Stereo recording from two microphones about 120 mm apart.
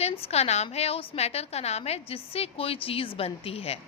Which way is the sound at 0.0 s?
60° left (ahead or behind).